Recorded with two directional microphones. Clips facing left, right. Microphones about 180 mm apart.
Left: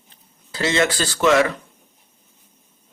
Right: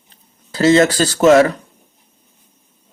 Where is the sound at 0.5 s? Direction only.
40° right (ahead or behind).